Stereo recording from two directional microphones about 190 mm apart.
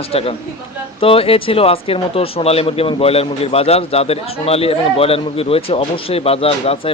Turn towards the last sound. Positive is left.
turn(degrees=30)  # may be behind; listen again after turning